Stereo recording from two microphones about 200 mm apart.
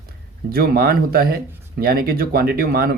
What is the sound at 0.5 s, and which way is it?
Speech, 50° right (ahead or behind).